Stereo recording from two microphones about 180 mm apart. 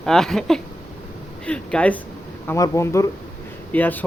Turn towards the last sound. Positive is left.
turn(degrees=10)  # may be behind; listen again after turning